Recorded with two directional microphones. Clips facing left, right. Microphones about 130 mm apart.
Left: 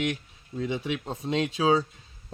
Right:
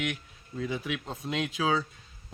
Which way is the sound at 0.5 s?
20° left (ahead or behind).